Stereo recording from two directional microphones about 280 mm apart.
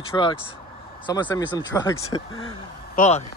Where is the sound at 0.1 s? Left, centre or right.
Centre.